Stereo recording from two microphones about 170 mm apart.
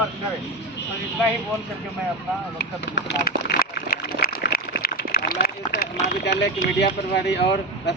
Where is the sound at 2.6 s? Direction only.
85° left.